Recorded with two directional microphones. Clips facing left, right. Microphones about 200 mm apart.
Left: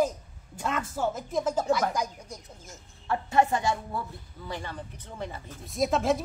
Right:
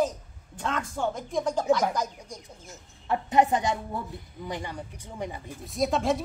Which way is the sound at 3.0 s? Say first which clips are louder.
Right 2 dB; 20° right (ahead or behind).